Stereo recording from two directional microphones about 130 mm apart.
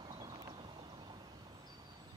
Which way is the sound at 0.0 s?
35° right (ahead or behind).